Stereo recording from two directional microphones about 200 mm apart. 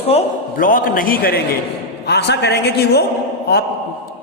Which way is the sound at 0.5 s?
45° left (ahead or behind).